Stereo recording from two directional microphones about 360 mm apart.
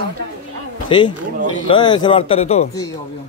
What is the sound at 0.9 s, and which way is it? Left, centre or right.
Speech, centre.